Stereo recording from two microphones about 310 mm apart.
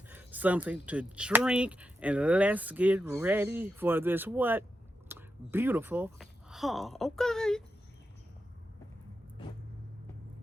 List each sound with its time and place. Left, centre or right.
0.1 s speech: centre